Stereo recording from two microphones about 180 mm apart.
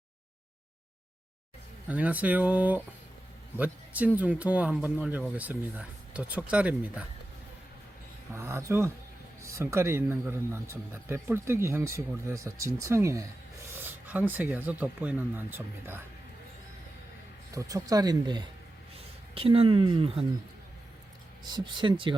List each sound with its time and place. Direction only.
1.9 s speech: 10° right (ahead or behind)
8.3 s speech: 15° right (ahead or behind)
17.5 s speech: 20° right (ahead or behind)
21.5 s speech: 25° right (ahead or behind)